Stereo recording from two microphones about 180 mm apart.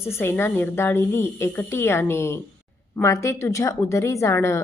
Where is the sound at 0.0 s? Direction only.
15° left (ahead or behind).